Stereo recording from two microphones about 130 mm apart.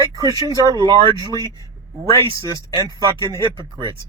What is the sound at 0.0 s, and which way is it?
Speech, 30° right (ahead or behind).